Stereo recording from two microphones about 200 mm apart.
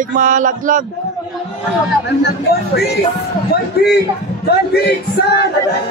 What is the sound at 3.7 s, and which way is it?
A man's voice, 55° left (ahead or behind).